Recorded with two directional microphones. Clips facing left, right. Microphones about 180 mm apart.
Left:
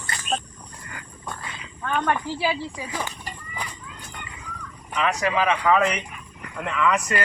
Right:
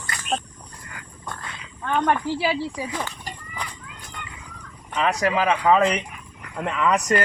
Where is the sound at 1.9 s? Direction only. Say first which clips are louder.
Right 2 dB; 20° right (ahead or behind).